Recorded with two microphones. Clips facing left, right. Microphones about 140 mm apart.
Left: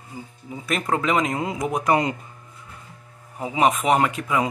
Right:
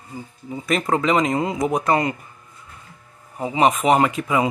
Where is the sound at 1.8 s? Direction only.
15° left (ahead or behind).